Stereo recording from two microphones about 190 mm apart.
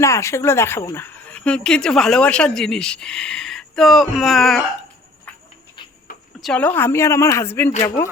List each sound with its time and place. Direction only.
0.0 s speech: 15° left (ahead or behind)
6.1 s a sound: 50° left (ahead or behind)
6.4 s a woman's voice: 5° left (ahead or behind)